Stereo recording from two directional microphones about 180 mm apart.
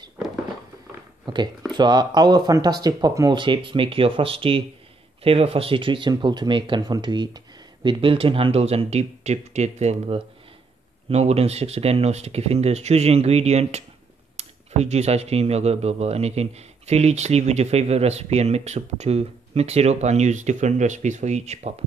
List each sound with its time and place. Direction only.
1.2 s speech: 25° right (ahead or behind)